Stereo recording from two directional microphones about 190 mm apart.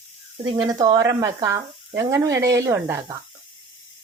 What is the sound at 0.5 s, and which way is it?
Speech, 20° right (ahead or behind).